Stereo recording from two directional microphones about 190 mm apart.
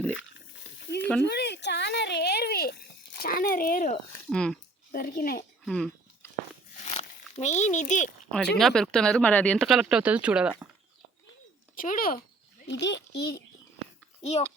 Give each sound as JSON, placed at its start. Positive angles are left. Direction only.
{"t": 1.2, "sound": "a sound", "side_deg": 60}
{"t": 3.2, "sound": "speech", "side_deg": 50}
{"t": 4.3, "sound": "speech", "side_deg": 5}
{"t": 4.9, "sound": "a child's voice", "side_deg": 50}
{"t": 5.6, "sound": "speech", "side_deg": 0}
{"t": 6.8, "sound": "crumpling", "side_deg": 35}
{"t": 8.5, "sound": "speech", "side_deg": 5}
{"t": 11.7, "sound": "a sound", "side_deg": 50}
{"t": 12.7, "sound": "a child's voice", "side_deg": 65}
{"t": 14.2, "sound": "a child's voice", "side_deg": 35}